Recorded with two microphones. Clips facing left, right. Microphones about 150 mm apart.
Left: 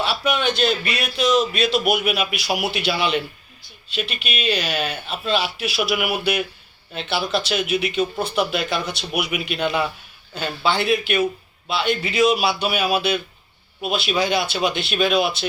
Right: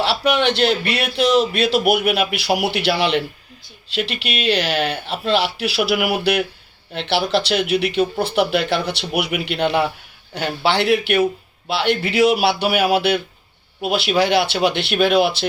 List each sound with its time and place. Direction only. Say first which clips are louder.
0.0 s a man's voice: right 4 dB; 70° right (ahead or behind)